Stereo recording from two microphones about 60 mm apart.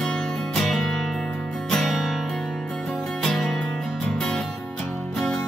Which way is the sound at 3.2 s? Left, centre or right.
Centre.